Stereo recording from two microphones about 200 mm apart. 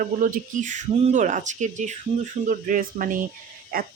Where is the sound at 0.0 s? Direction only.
45° right (ahead or behind).